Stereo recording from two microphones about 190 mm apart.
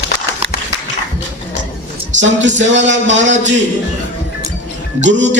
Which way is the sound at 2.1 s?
75° right (ahead or behind).